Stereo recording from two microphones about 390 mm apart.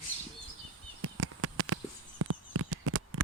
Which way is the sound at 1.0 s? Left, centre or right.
Right.